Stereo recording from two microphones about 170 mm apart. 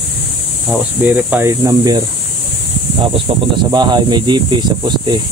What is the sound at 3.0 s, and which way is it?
Speech, 30° right (ahead or behind).